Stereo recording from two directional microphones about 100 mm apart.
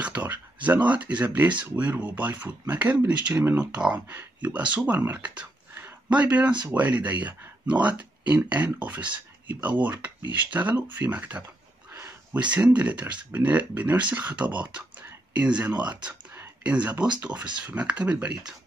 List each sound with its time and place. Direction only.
0.0 s speech: 15° right (ahead or behind)